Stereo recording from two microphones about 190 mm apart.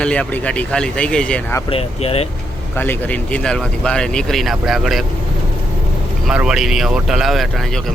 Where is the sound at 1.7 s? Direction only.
30° left (ahead or behind).